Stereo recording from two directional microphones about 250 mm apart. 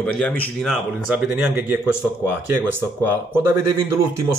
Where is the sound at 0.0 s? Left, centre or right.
Centre.